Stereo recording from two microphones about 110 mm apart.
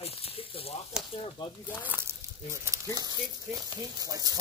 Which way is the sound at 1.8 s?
15° right (ahead or behind).